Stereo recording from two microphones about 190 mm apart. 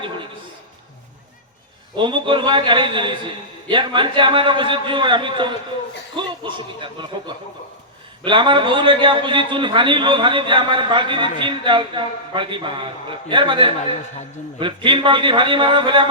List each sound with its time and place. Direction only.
2.0 s a man's voice: 25° right (ahead or behind)